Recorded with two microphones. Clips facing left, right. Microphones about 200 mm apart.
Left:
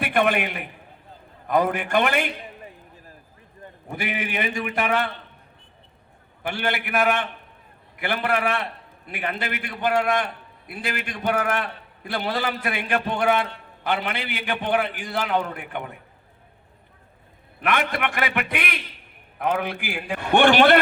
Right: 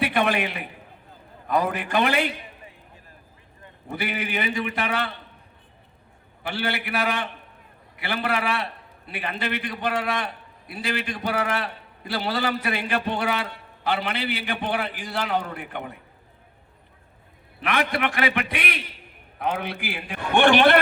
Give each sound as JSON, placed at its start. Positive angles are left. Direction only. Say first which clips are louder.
{"t": 0.0, "sound": "a man's voice", "louder": "left 1 dB", "side_deg": 50}
{"t": 3.6, "sound": "a man's voice", "louder": "even", "side_deg": 50}
{"t": 6.5, "sound": "a man's voice", "louder": "left 2 dB", "side_deg": 55}
{"t": 17.6, "sound": "a man's voice", "louder": "even", "side_deg": 50}